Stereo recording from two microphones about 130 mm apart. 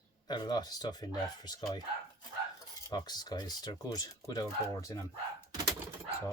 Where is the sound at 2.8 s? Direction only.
30° left (ahead or behind).